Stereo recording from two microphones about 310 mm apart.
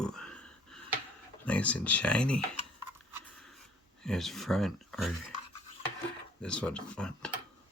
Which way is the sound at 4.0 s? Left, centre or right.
Centre.